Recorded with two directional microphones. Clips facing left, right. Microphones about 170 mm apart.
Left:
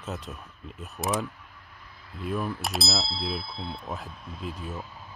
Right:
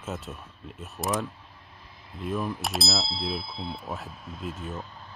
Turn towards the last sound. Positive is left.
turn(degrees=0)  # may be behind; listen again after turning